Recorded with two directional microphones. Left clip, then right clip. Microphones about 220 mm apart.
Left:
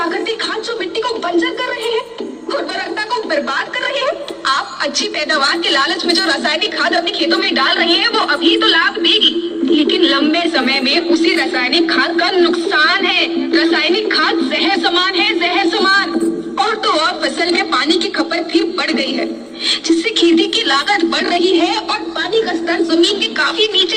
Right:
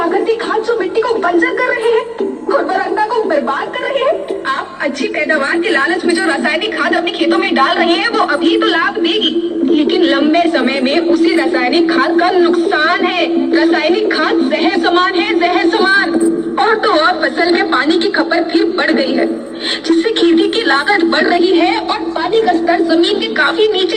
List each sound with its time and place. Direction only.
5.3 s a woman's voice: 15° left (ahead or behind); by 23.9 s 50° left (ahead or behind)